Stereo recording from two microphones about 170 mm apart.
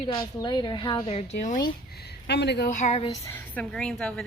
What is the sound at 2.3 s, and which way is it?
Speech, 80° left.